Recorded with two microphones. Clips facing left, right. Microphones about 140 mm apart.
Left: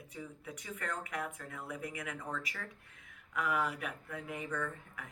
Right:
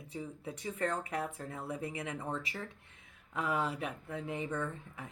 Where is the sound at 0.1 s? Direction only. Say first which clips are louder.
Right 5 dB; 30° right (ahead or behind).